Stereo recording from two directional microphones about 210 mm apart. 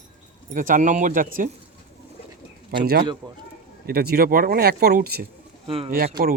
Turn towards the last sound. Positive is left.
turn(degrees=-45)  # may be behind; listen again after turning